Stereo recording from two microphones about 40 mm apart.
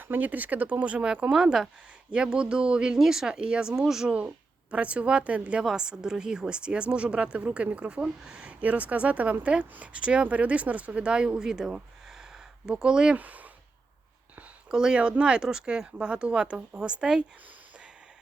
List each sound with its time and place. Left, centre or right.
0.0 s speech: right
1.3 s speech: centre
2.0 s speech: right
3.0 s speech: centre
3.8 s speech: centre
4.7 s speech: right
5.7 s speech: centre
8.6 s speech: right; by 11.7 s centre
12.0 s a sound: centre
12.8 s speech: right
13.1 s speech: right
14.7 s speech: centre